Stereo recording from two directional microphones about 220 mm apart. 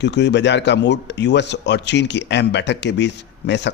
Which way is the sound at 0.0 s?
50° left (ahead or behind).